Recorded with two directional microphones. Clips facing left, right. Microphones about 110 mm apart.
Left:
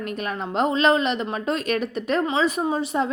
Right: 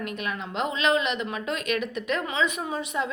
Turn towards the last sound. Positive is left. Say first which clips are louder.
# left 6 dB
turn(degrees=35)  # may be behind; listen again after turning